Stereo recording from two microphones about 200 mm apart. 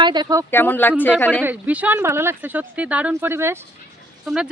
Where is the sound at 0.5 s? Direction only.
10° left (ahead or behind).